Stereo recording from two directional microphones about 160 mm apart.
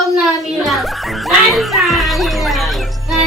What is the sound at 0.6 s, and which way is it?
Speech, centre (ahead or behind).